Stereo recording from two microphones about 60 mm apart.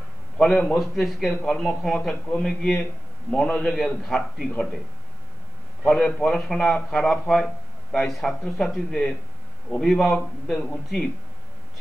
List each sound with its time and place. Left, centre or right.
0.4 s a man's voice: centre
0.7 s a man's voice: centre
3.4 s a man's voice: left
3.7 s a man's voice: centre
5.9 s a man's voice: centre
9.9 s a man's voice: centre